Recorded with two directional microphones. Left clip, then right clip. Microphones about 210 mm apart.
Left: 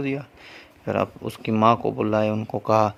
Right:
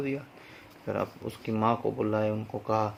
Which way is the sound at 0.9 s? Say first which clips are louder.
Left 8 dB; 50° left (ahead or behind).